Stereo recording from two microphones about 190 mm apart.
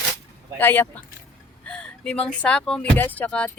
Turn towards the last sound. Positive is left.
turn(degrees=5)  # may be behind; listen again after turning